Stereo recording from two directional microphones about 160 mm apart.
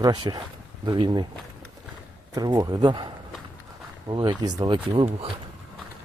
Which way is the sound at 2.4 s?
25° right (ahead or behind).